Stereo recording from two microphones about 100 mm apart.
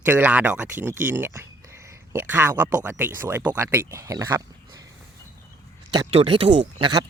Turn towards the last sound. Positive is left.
turn(degrees=-55)  # may be behind; listen again after turning